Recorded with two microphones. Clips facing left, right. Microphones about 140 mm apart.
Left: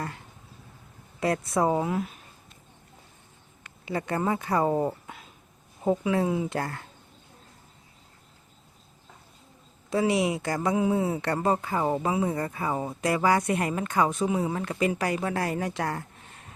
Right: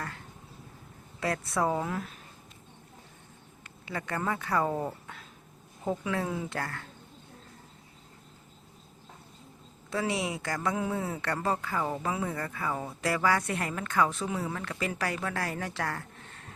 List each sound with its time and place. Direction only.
1.2 s speech: 20° left (ahead or behind)
3.8 s speech: 20° left (ahead or behind)
9.9 s speech: 20° left (ahead or behind)